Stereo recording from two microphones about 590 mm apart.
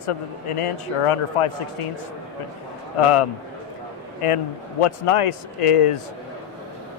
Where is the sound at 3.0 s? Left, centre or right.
Left.